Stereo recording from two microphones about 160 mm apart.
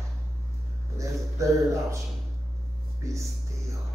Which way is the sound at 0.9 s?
20° right (ahead or behind).